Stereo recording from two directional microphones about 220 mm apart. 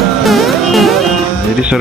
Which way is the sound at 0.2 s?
Centre (ahead or behind).